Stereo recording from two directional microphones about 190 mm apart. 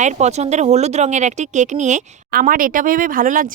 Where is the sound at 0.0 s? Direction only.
40° right (ahead or behind).